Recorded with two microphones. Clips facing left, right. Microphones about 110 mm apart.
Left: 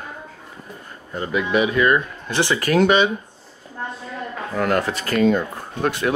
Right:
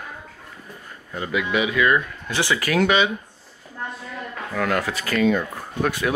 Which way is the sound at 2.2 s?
25° left (ahead or behind).